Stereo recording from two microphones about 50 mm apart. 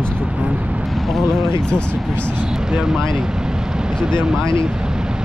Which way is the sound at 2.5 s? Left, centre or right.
Centre.